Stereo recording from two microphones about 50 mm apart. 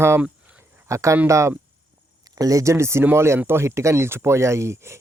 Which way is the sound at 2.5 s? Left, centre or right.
Right.